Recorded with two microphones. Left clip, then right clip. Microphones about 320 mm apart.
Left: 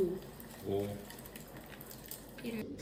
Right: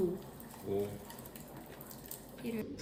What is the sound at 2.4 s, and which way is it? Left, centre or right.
Speech, centre.